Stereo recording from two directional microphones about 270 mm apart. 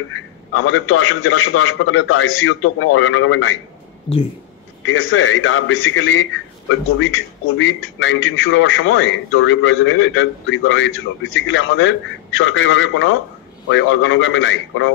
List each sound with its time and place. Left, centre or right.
0.5 s a man's voice: left
4.8 s a man's voice: left